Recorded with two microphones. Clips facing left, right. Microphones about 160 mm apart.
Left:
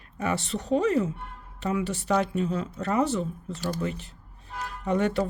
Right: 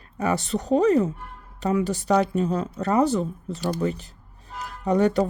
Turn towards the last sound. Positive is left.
turn(degrees=-40)  # may be behind; listen again after turning